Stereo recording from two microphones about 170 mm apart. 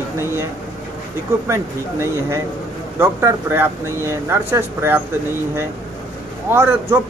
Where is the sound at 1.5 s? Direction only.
15° right (ahead or behind).